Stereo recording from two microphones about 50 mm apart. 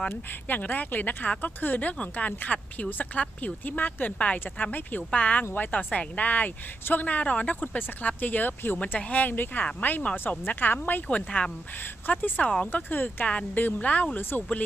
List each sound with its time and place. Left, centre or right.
0.4 s speech: left
8.8 s speech: left
10.0 s speech: left
10.4 s speech: left
11.1 s speech: left
13.7 s speech: left
14.2 s speech: left